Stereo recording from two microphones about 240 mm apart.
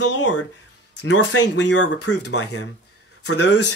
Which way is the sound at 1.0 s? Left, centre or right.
Left.